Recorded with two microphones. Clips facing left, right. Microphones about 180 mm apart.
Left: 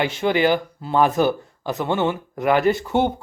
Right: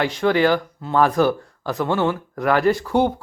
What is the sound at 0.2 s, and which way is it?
Speech, 15° left (ahead or behind).